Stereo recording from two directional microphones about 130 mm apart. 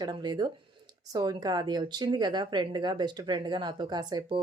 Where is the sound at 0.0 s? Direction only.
35° right (ahead or behind).